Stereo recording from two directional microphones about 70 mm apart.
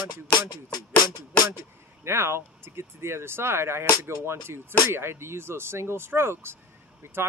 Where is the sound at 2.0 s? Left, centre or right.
Right.